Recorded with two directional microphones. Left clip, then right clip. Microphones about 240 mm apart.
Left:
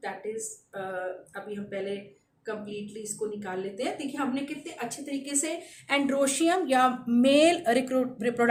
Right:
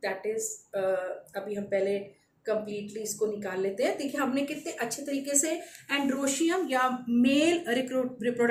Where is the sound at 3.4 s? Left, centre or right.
Centre.